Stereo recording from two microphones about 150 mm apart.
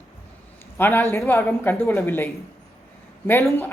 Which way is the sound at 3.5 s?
15° left (ahead or behind).